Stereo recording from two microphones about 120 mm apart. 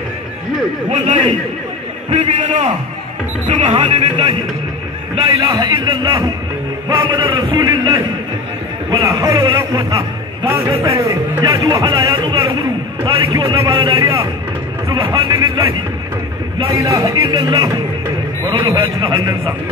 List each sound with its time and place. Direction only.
0.8 s a man's voice: 70° right (ahead or behind)
2.0 s a man's voice: 60° right (ahead or behind)
5.3 s speech: 30° right (ahead or behind)
7.5 s speech: 35° right (ahead or behind)
8.9 s music: 25° right (ahead or behind)
9.7 s speech: 30° right (ahead or behind)
10.6 s music: 25° right (ahead or behind)
11.5 s speech: 30° right (ahead or behind)
13.9 s music: 25° right (ahead or behind)
14.9 s speech: 35° right (ahead or behind)
16.7 s speech: 25° right (ahead or behind)
18.7 s music: 25° right (ahead or behind)